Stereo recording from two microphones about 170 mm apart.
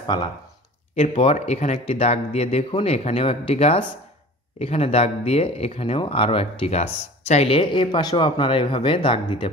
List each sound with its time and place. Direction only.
0.0 s speech: 25° left (ahead or behind)